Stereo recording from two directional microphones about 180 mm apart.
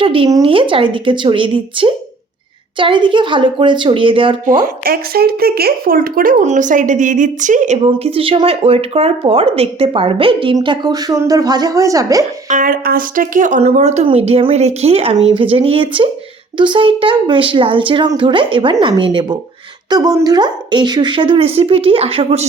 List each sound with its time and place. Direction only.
0.0 s speech: 30° right (ahead or behind)
4.4 s a woman's voice: 50° right (ahead or behind)
7.9 s speech: 30° right (ahead or behind)
12.5 s a woman's voice: 45° right (ahead or behind); by 22.4 s 30° right (ahead or behind)